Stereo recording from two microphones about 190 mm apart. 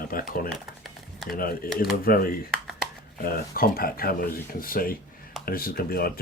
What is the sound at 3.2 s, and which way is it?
Speech, 50° left (ahead or behind).